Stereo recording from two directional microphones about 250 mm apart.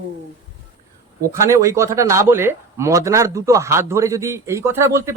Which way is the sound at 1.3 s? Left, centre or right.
Centre.